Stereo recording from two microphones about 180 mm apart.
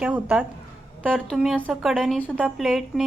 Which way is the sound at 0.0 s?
5° right (ahead or behind).